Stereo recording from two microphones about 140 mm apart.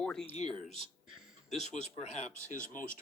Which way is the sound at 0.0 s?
5° left (ahead or behind).